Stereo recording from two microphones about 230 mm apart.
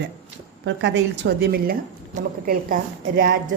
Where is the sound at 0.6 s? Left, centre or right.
Right.